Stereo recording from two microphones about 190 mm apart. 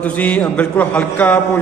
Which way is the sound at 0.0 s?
5° left (ahead or behind).